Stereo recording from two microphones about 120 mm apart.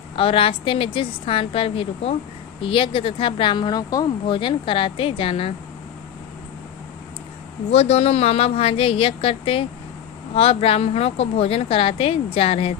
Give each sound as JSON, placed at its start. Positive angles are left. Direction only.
{"t": 0.2, "sound": "a woman's voice", "side_deg": 50}
{"t": 4.4, "sound": "a woman's voice", "side_deg": 45}
{"t": 7.7, "sound": "a woman's voice", "side_deg": 60}